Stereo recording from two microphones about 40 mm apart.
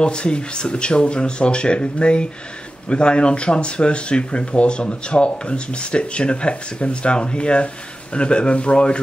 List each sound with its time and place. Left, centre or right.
0.0 s speech: left